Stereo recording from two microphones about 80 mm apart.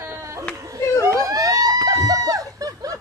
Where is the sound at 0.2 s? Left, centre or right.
Right.